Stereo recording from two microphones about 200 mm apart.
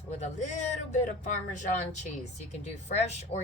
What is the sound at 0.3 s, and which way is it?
Speech, 35° left (ahead or behind).